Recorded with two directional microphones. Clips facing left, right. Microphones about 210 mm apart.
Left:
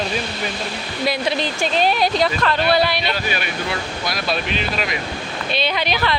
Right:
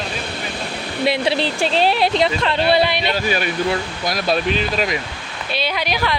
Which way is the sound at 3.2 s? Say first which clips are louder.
Right 5 dB; 40° right (ahead or behind).